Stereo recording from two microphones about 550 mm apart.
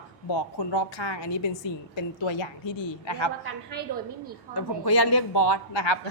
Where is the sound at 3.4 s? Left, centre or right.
Centre.